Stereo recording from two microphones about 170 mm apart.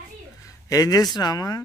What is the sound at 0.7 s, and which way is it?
Speech, 20° left (ahead or behind).